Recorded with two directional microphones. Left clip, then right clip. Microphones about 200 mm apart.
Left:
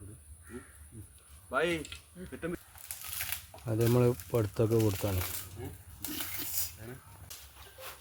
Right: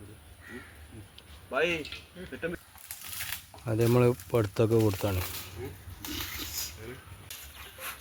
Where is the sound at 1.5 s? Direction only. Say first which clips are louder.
Right 2 dB; 20° left (ahead or behind).